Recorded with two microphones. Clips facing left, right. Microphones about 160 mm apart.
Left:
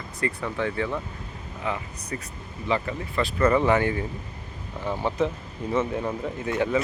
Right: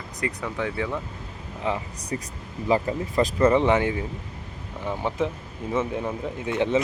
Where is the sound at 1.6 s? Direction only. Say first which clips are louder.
Right 3 dB; 30° right (ahead or behind).